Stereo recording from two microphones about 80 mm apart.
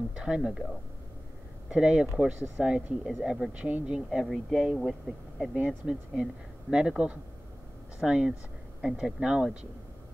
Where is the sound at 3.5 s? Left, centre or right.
Centre.